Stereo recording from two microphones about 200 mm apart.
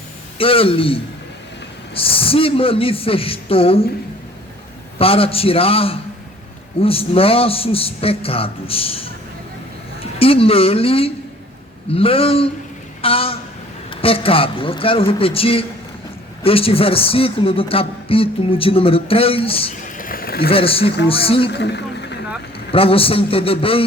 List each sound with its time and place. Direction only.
0.3 s a man's voice: 30° left (ahead or behind)
4.9 s a man's voice: 30° left (ahead or behind)
20.0 s a sound: 45° left (ahead or behind)
20.5 s a man's voice: 30° left (ahead or behind)
21.5 s vehicle: 60° left (ahead or behind)
22.7 s a man's voice: 30° left (ahead or behind)